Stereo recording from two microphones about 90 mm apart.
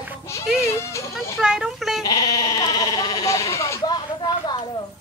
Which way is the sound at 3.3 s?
35° left (ahead or behind).